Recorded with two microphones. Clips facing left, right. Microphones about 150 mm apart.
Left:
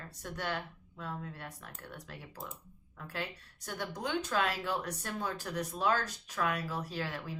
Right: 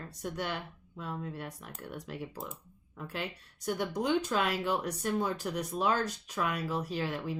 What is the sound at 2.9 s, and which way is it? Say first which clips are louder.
Speech: right 3 dB; 20° right (ahead or behind).